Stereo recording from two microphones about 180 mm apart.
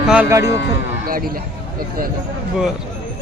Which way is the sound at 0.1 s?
10° right (ahead or behind).